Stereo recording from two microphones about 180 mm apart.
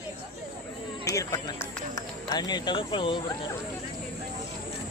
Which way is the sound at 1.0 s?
20° left (ahead or behind).